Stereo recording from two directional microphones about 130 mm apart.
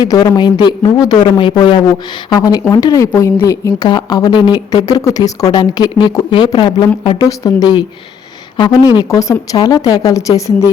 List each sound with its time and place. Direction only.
0.0 s speech: 30° left (ahead or behind)